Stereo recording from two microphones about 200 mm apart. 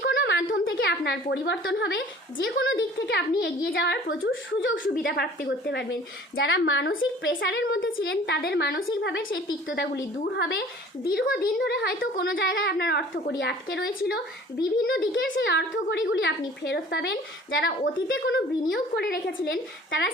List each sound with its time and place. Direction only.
0.0 s a sound: 55° left (ahead or behind)
0.5 s a woman's voice: 70° left (ahead or behind); by 12.3 s 50° left (ahead or behind)
12.3 s a woman's voice: 65° left (ahead or behind)